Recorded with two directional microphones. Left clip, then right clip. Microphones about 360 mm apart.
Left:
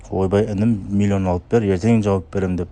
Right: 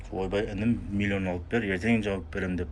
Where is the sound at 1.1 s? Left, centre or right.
Left.